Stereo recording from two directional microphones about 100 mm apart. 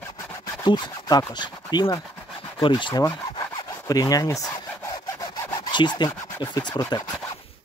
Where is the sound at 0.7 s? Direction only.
45° left (ahead or behind).